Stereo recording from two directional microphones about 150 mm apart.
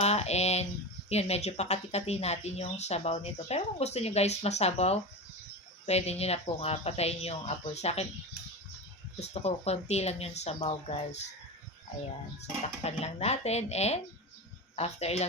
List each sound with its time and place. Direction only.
0.0 s a sound: 45° left (ahead or behind)
1.1 s speech: 45° left (ahead or behind)
9.2 s speech: 45° left (ahead or behind)
12.6 s speech: 45° left (ahead or behind)